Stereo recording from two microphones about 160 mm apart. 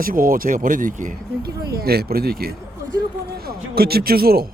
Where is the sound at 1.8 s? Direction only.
75° right (ahead or behind).